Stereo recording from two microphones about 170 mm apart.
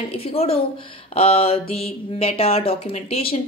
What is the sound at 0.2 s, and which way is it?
Speech, 35° left (ahead or behind).